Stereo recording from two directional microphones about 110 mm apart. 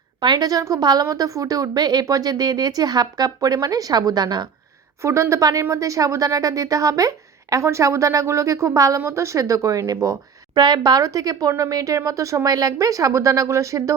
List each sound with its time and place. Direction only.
0.2 s speech: 40° right (ahead or behind)
5.0 s a woman's voice: 25° right (ahead or behind)